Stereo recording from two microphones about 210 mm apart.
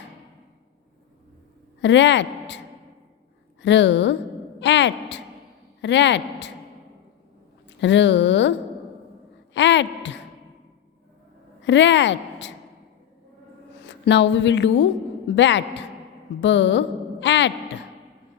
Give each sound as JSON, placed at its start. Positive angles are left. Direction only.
{"t": 1.8, "sound": "speech", "side_deg": 60}
{"t": 3.6, "sound": "speech", "side_deg": 60}
{"t": 7.8, "sound": "speech", "side_deg": 60}
{"t": 9.6, "sound": "speech", "side_deg": 60}
{"t": 11.6, "sound": "speech", "side_deg": 60}
{"t": 13.8, "sound": "a woman's voice", "side_deg": 55}